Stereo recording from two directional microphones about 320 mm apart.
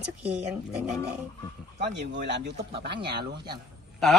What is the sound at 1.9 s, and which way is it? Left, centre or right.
Speech, right.